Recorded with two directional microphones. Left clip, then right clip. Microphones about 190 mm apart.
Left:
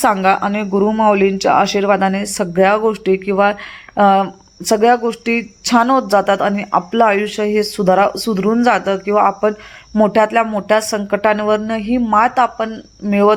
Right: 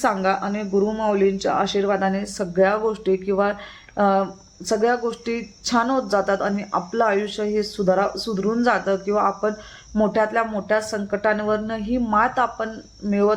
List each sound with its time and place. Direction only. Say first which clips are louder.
0.0 s speech: left 8 dB; 25° left (ahead or behind)